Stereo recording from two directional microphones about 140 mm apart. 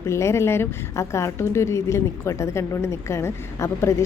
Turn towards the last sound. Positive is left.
turn(degrees=20)  # may be behind; listen again after turning